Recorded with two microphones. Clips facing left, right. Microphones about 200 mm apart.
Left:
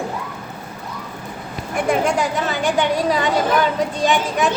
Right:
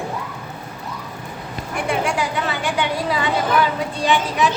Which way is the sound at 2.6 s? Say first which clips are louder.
Left 6 dB; 40° left (ahead or behind).